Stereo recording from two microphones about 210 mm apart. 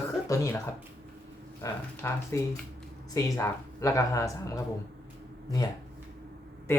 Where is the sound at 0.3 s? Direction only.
15° left (ahead or behind).